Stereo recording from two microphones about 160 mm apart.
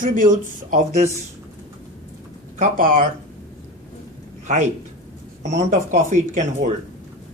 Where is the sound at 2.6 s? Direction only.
55° right (ahead or behind).